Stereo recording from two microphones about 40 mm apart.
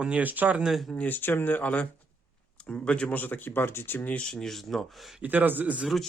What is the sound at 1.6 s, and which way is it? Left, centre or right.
Speech, left.